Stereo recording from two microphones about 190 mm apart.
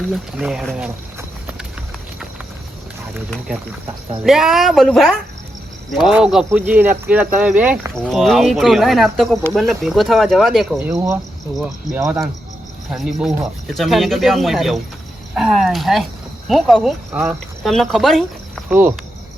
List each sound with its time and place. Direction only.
0.1 s speech: 5° right (ahead or behind)
3.2 s speech: centre (ahead or behind)
10.9 s speech: 15° right (ahead or behind)
12.9 s speech: 5° right (ahead or behind)
18.7 s speech: 10° right (ahead or behind)